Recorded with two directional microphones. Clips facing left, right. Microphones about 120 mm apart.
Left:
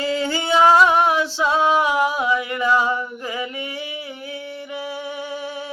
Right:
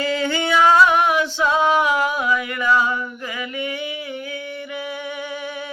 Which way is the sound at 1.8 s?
25° left (ahead or behind).